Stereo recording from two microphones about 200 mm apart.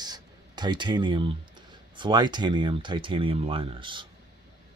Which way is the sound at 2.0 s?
20° right (ahead or behind).